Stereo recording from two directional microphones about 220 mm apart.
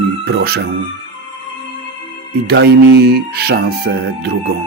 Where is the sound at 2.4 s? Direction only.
50° right (ahead or behind).